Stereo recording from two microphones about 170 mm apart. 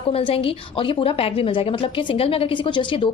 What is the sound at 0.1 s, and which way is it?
A woman's voice, 35° left (ahead or behind).